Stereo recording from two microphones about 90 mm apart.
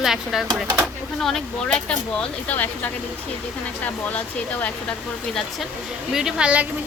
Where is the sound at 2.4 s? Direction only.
20° left (ahead or behind).